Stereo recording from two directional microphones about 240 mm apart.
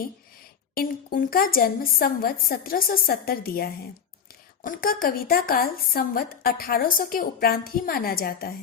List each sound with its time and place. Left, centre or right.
0.7 s speech: left